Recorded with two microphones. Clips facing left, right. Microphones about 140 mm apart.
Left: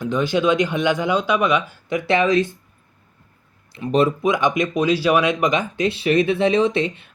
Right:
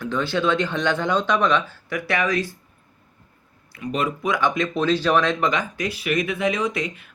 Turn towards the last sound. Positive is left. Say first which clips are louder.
# left 6 dB
turn(degrees=25)  # may be behind; listen again after turning